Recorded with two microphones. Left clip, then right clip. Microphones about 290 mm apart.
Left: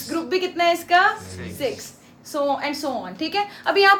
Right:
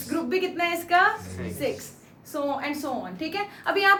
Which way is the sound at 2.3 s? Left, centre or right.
Left.